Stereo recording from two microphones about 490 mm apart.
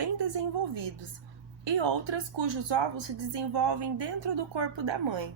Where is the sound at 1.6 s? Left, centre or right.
Right.